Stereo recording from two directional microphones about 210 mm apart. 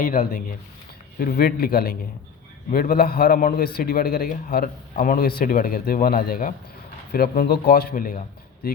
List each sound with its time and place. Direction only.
0.0 s speech: 40° left (ahead or behind)